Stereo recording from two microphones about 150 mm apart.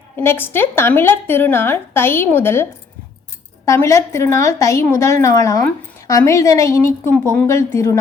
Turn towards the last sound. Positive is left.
turn(degrees=15)  # may be behind; listen again after turning